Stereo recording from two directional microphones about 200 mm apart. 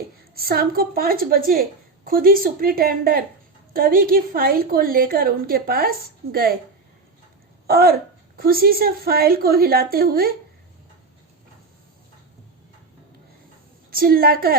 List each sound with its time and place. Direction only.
0.3 s a woman's voice: 50° right (ahead or behind)
7.7 s a woman's voice: 50° right (ahead or behind)
13.9 s a woman's voice: 45° right (ahead or behind)